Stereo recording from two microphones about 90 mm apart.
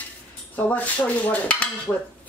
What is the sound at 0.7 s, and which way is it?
Dishes, 15° left (ahead or behind).